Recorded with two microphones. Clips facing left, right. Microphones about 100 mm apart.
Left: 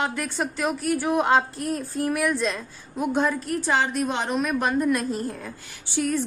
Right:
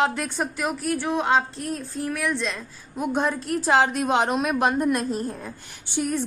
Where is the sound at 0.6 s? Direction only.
Centre (ahead or behind).